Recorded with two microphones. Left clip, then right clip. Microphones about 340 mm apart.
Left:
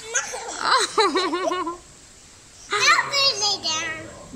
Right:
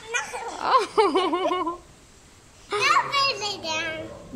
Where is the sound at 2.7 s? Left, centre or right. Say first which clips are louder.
Left 4 dB; centre.